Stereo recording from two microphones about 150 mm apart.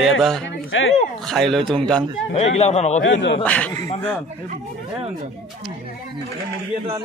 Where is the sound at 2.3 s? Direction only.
45° left (ahead or behind).